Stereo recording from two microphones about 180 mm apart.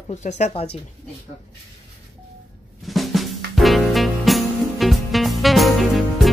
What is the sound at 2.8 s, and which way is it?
Music, centre (ahead or behind).